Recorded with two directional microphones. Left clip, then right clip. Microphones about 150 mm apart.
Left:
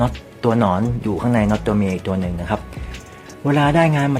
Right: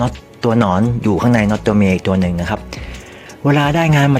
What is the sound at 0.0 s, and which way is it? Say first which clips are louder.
Speech: right 1 dB; 40° right (ahead or behind).